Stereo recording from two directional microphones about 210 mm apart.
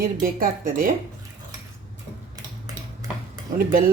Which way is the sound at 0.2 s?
40° right (ahead or behind).